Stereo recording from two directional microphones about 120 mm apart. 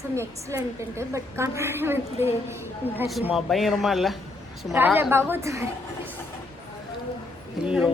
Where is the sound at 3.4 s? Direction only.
Centre (ahead or behind).